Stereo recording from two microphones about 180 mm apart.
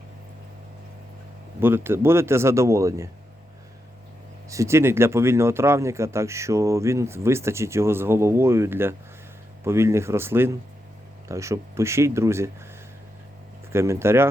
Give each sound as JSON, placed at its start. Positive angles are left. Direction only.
{"t": 1.6, "sound": "speech", "side_deg": -10}
{"t": 4.4, "sound": "speech", "side_deg": -15}
{"t": 13.7, "sound": "speech", "side_deg": -15}